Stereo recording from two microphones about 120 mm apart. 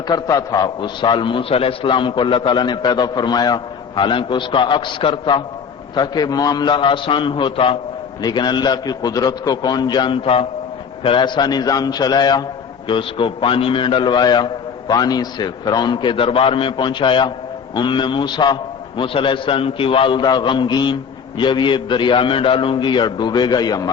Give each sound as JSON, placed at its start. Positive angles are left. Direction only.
{"t": 0.1, "sound": "a man's voice", "side_deg": 30}
{"t": 8.2, "sound": "a man's voice", "side_deg": 35}